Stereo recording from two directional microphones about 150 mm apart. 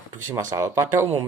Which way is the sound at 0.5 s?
20° right (ahead or behind).